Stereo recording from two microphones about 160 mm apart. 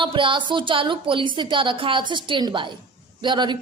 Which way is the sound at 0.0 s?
30° right (ahead or behind).